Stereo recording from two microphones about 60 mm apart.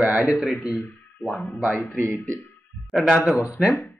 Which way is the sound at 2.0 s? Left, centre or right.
Left.